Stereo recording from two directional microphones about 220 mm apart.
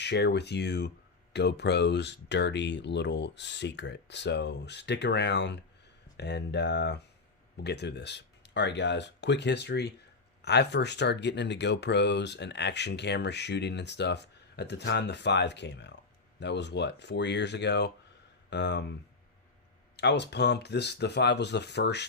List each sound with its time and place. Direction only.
0.0 s speech: 50° left (ahead or behind)
20.0 s speech: 50° left (ahead or behind)